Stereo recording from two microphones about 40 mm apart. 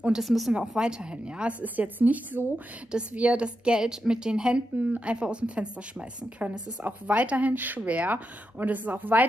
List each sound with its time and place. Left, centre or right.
0.2 s speech: centre
0.5 s speech: right
1.6 s speech: right
2.9 s speech: right
3.8 s speech: centre
6.8 s speech: right